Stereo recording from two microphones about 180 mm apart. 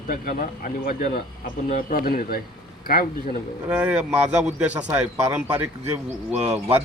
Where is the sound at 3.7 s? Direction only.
5° right (ahead or behind).